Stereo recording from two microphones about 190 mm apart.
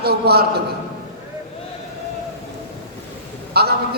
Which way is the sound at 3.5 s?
55° right (ahead or behind).